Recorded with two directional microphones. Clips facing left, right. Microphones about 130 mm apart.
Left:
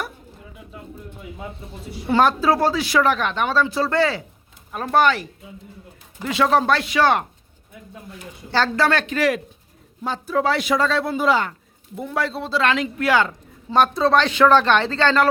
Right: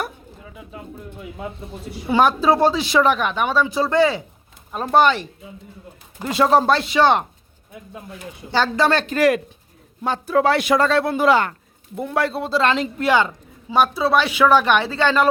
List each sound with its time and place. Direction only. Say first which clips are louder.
2.0 s speech: right 1 dB; 15° right (ahead or behind)
6.1 s speech: right 2 dB; 35° right (ahead or behind)
8.4 s speech: right 1 dB; 15° right (ahead or behind)
8.9 s speech: right 1 dB; 30° right (ahead or behind)
9.1 s speech: right 4 dB; 45° right (ahead or behind)
10.0 s a man's voice: right 3 dB; 65° right (ahead or behind)
12.5 s speech: right 1 dB; 30° right (ahead or behind)
13.7 s speech: left 1 dB; 5° right (ahead or behind)